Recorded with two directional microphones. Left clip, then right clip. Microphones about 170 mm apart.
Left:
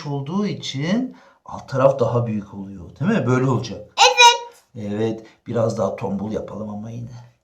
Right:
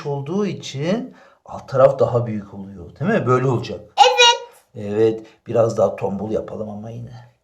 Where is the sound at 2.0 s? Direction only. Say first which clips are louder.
Right 2 dB; 20° right (ahead or behind).